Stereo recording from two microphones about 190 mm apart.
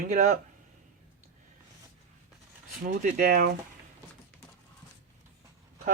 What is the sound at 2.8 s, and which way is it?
Speech, 45° right (ahead or behind).